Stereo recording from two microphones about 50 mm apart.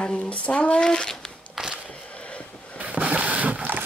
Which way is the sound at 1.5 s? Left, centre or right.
Centre.